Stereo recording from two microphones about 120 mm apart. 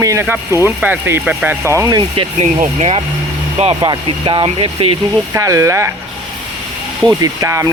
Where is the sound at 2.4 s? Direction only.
75° right (ahead or behind).